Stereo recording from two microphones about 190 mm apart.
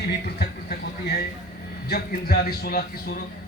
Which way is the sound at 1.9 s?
55° left (ahead or behind).